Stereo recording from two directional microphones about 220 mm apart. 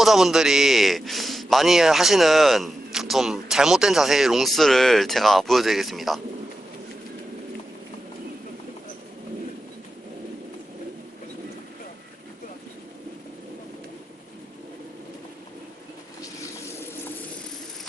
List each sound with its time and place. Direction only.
0.0 s a man's voice: centre (ahead or behind)